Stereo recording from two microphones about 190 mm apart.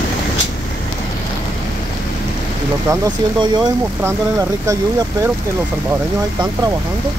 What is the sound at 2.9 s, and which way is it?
Speech, 25° right (ahead or behind).